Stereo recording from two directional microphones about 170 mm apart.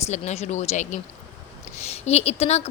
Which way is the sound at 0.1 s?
40° left (ahead or behind).